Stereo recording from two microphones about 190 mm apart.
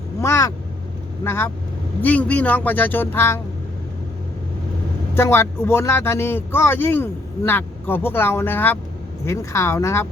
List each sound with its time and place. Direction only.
0.2 s vehicle: 15° left (ahead or behind)
1.2 s speech: 10° left (ahead or behind)
5.1 s speech: 15° left (ahead or behind)